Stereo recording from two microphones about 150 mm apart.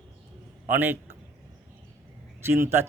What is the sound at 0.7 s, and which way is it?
Speech, 15° right (ahead or behind).